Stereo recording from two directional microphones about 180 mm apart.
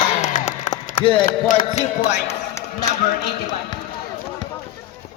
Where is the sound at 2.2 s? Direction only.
15° left (ahead or behind).